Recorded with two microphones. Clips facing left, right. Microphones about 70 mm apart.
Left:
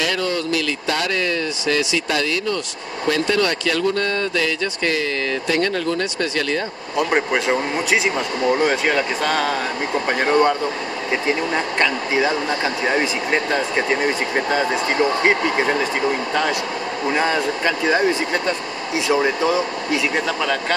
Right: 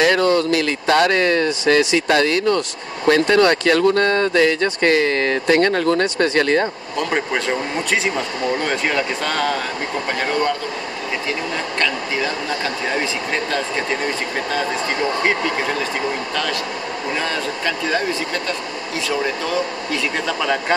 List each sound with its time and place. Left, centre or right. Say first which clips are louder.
0.0 s speech: right 7 dB; right
7.0 s speech: left 2 dB; centre
7.3 s speech: left 2 dB; centre
10.0 s speech: left 4 dB; centre
17.1 s speech: left 4 dB; centre